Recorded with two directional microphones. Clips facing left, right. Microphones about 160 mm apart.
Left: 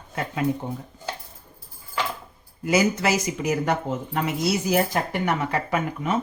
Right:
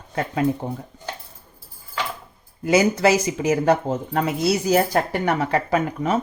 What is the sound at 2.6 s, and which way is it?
Speech, 30° right (ahead or behind).